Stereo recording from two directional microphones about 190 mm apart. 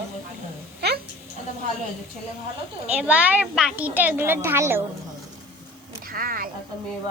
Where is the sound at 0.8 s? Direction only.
60° right (ahead or behind).